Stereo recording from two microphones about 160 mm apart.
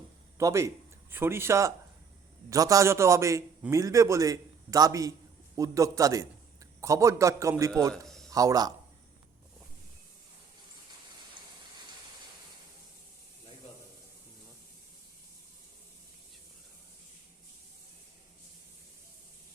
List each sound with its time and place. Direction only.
0.3 s a man's voice: 20° right (ahead or behind)
8.0 s a sound: centre (ahead or behind)
8.3 s speech: 20° right (ahead or behind)